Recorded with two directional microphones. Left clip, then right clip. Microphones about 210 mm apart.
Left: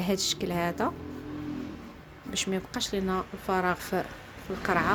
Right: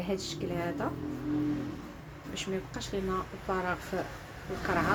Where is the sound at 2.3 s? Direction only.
50° left (ahead or behind).